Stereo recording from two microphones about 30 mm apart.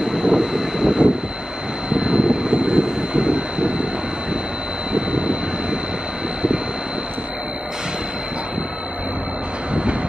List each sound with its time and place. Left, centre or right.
0.0 s vehicle: right
4.9 s vehicle: right